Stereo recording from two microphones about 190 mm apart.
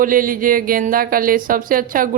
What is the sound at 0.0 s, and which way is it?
A woman's voice, 45° right (ahead or behind).